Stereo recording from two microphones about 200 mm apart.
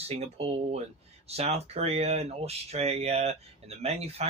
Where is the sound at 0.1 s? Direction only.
30° right (ahead or behind).